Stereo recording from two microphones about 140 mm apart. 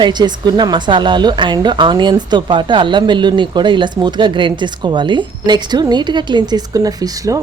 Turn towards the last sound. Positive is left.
turn(degrees=-25)  # may be behind; listen again after turning